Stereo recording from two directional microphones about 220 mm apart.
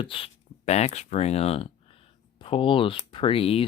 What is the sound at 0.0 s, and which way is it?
Speech, 25° left (ahead or behind).